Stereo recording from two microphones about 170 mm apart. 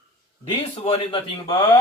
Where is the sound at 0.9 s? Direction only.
25° left (ahead or behind).